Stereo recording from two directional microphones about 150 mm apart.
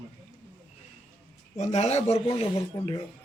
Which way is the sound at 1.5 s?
50° left (ahead or behind).